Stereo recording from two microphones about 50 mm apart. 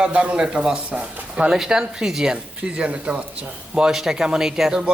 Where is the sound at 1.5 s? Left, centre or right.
Centre.